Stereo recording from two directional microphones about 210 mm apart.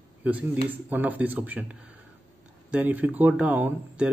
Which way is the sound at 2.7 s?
10° right (ahead or behind).